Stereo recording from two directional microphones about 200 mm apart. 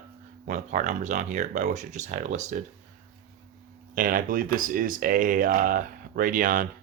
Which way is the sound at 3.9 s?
45° right (ahead or behind).